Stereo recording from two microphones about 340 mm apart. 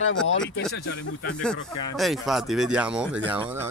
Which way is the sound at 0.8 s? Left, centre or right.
Left.